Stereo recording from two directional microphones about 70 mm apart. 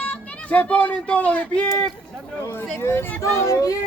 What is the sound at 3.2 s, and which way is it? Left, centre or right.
Speech, left.